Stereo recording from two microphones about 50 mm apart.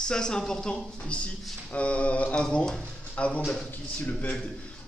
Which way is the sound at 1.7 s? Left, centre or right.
Left.